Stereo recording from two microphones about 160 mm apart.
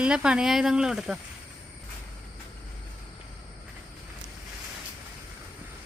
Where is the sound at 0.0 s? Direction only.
5° right (ahead or behind).